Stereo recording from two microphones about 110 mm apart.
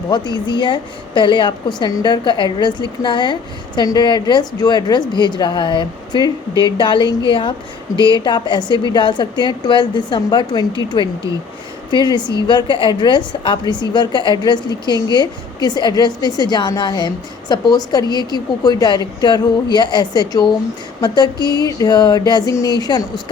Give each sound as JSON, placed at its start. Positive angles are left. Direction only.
{"t": 0.1, "sound": "a woman's voice", "side_deg": 45}